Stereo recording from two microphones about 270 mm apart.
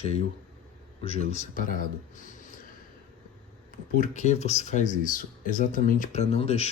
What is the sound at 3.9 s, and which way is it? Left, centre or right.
Speech, left.